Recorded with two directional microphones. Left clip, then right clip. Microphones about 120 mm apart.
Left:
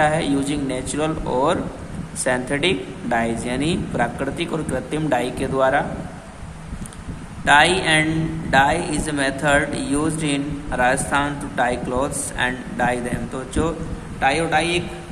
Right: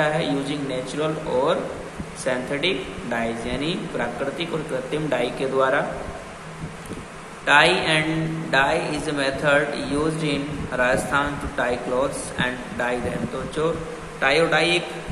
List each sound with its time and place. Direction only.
0.0 s a man's voice: 90° left
2.2 s a man's voice: 90° left
7.4 s a man's voice: 90° left
13.6 s a man's voice: 90° left
14.2 s a man's voice: 45° left (ahead or behind)